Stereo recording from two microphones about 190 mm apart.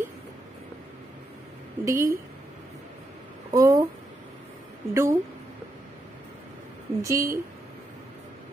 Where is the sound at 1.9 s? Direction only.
15° right (ahead or behind).